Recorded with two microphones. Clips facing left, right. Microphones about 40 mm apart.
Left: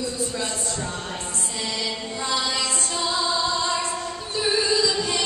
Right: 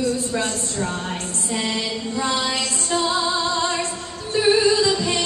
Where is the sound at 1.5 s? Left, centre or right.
Right.